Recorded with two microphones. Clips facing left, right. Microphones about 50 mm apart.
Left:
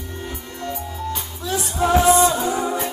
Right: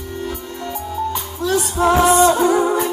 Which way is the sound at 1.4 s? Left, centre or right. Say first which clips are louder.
Right 5 dB; right.